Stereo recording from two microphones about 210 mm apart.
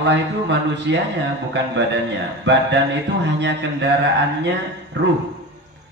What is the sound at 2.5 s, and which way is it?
A man's voice, 55° right (ahead or behind).